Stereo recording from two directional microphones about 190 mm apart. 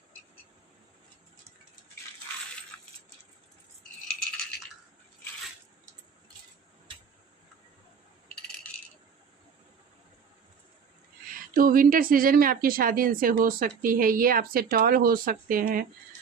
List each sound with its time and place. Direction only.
2.7 s coin: 10° left (ahead or behind)
11.5 s a woman's voice: 50° right (ahead or behind)